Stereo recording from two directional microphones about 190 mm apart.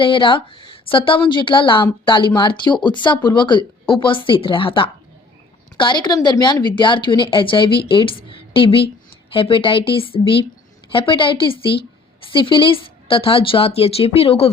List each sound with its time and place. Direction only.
0.0 s a woman's voice: 25° left (ahead or behind)